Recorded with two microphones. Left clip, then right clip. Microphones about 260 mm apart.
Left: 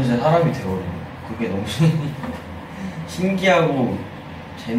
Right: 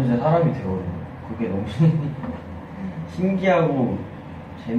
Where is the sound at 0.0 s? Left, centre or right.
Centre.